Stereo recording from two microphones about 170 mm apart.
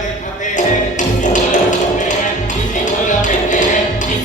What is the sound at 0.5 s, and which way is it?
Music, 45° left (ahead or behind).